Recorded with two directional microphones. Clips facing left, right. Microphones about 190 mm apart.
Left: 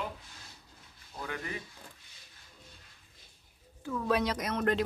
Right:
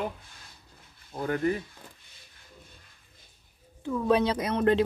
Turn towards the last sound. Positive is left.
turn(degrees=-30)  # may be behind; listen again after turning